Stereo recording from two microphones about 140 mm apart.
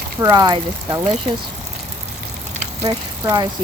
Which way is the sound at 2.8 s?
25° right (ahead or behind).